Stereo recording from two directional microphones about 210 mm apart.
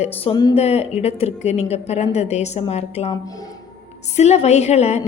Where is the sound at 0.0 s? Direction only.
20° left (ahead or behind).